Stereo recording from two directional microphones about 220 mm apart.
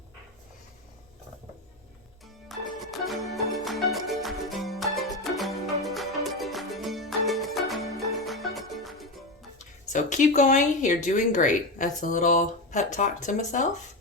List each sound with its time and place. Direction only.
2.5 s music: centre (ahead or behind)
9.9 s speech: 35° left (ahead or behind)